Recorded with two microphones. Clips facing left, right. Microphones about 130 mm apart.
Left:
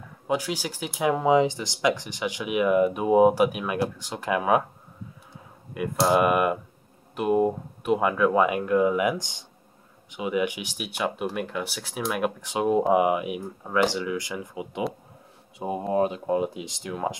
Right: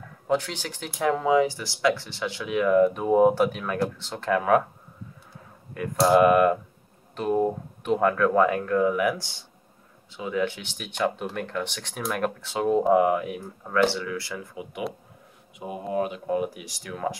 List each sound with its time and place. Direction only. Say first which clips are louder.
0.3 s speech: right 1 dB; 10° left (ahead or behind)
5.8 s speech: right 3 dB; 5° left (ahead or behind); by 17.2 s 20° left (ahead or behind)